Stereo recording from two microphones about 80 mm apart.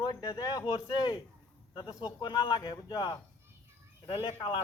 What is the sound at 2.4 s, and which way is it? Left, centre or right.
Speech, left.